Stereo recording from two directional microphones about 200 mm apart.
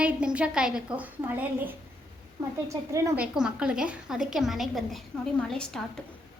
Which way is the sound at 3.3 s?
5° right (ahead or behind).